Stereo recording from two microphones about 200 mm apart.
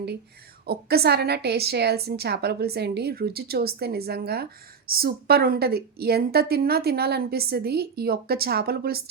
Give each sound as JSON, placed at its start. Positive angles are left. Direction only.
{"t": 0.6, "sound": "a woman's voice", "side_deg": -50}